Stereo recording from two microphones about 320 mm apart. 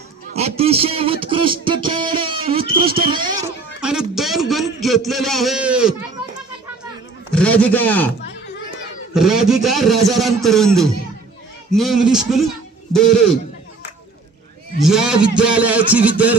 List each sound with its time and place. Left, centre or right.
0.3 s a man's voice: centre
3.8 s a sound: centre
7.3 s a man's voice: centre
9.1 s a man's voice: centre
14.8 s a man's voice: centre